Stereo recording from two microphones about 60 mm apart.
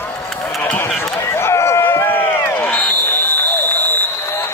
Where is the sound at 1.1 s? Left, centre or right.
Left.